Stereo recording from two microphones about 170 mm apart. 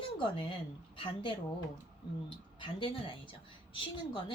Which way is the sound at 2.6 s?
30° left (ahead or behind).